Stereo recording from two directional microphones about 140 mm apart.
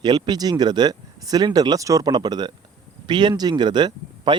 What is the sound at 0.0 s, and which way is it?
Speech, 30° right (ahead or behind).